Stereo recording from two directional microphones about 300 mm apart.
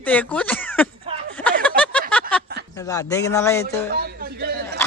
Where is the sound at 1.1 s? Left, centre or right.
Centre.